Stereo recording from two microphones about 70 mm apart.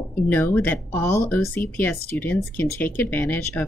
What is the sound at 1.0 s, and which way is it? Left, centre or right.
Speech, left.